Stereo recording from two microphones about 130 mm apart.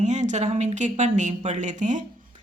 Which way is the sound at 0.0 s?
65° right (ahead or behind).